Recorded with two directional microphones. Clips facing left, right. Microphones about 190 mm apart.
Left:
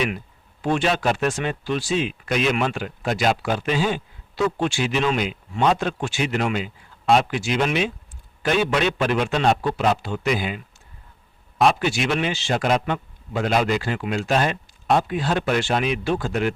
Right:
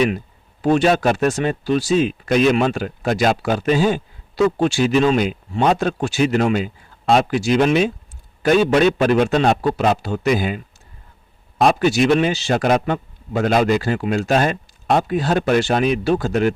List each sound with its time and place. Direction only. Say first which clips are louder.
0.6 s speech: right 6 dB; 40° right (ahead or behind)